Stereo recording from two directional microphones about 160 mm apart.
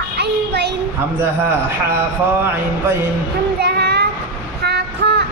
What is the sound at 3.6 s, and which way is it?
Child singing, 90° right.